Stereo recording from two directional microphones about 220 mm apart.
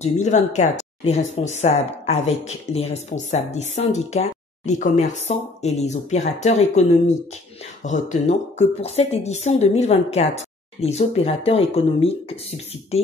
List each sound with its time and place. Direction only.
0.0 s speech: 30° left (ahead or behind)